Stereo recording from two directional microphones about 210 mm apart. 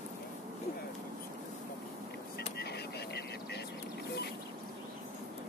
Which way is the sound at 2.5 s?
50° left (ahead or behind).